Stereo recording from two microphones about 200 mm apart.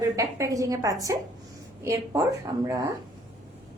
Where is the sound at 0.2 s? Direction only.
15° right (ahead or behind).